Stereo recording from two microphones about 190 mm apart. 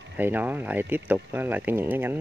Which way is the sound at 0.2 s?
10° right (ahead or behind).